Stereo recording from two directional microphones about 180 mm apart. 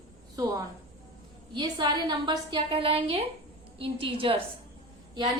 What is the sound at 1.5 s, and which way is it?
A woman's voice, 25° right (ahead or behind).